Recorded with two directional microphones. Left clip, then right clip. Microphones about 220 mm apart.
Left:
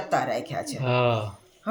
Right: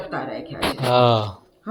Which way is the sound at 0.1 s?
60° left (ahead or behind).